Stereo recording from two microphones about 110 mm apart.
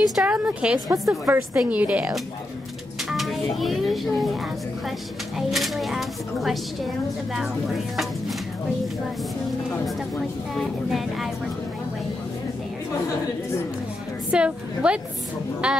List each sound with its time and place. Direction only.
0.1 s a woman's voice: 10° right (ahead or behind)
1.2 s a woman's voice: 20° right (ahead or behind)
3.1 s a child's voice: centre (ahead or behind)
5.5 s speech: centre (ahead or behind)
7.9 s speech: centre (ahead or behind)
10.5 s speech: centre (ahead or behind)
14.3 s a woman's voice: 10° right (ahead or behind)